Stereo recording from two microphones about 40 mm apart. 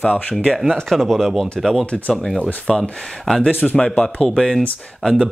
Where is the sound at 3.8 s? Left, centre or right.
Left.